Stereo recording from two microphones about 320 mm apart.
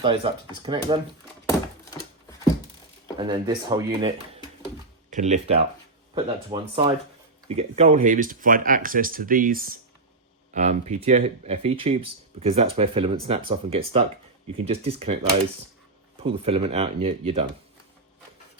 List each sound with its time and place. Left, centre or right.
0.0 s speech: centre
1.5 s thunk: centre
3.2 s speech: centre
5.1 s speech: right
16.2 s speech: centre